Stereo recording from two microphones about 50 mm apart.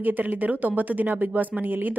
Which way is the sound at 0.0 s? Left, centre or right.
Right.